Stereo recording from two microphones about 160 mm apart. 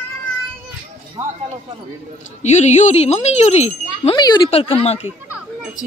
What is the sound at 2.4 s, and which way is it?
Speech, 45° left (ahead or behind).